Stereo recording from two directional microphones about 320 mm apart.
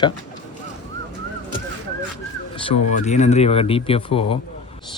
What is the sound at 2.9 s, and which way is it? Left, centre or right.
Speech, left.